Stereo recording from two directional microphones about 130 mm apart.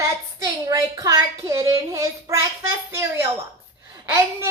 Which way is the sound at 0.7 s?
25° right (ahead or behind).